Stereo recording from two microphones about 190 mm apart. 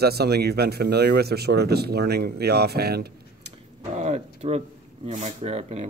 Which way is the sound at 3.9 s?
35° right (ahead or behind).